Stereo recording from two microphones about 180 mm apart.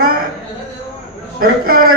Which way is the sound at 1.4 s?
55° right (ahead or behind).